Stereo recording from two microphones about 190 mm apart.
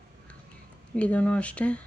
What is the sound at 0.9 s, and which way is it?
Speech, 5° left (ahead or behind).